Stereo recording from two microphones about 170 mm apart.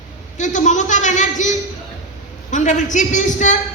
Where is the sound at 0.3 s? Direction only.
45° left (ahead or behind).